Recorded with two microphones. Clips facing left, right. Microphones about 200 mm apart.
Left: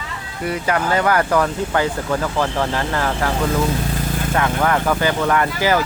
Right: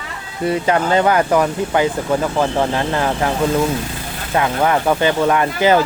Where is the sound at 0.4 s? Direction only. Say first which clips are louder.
Right 4 dB; 25° right (ahead or behind).